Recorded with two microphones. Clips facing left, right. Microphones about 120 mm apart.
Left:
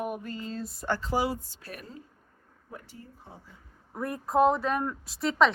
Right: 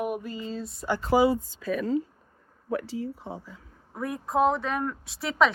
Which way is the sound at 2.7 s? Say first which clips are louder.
Right 16 dB; 90° right.